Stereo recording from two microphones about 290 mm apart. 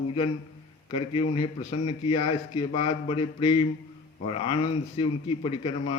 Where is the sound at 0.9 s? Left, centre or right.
Centre.